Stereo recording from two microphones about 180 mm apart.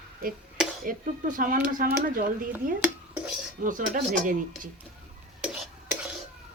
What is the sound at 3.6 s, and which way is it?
Speech, 50° right (ahead or behind).